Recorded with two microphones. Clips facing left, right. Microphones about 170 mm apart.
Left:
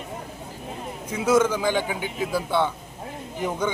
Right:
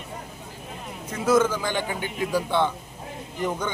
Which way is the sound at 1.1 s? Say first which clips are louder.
Left 1 dB; 10° left (ahead or behind).